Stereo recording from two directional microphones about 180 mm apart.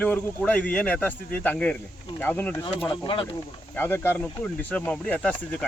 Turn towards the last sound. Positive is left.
turn(degrees=5)  # may be behind; listen again after turning